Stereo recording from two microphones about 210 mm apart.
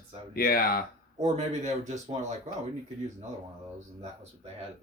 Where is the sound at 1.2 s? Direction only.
35° right (ahead or behind).